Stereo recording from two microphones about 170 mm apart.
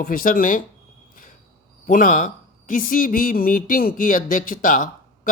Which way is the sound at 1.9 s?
50° left (ahead or behind).